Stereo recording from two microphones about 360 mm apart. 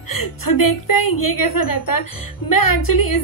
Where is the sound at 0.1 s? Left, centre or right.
Left.